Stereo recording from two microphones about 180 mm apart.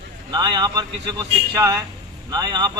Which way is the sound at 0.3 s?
25° right (ahead or behind).